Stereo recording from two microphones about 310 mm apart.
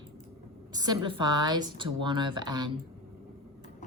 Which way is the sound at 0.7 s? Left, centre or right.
Centre.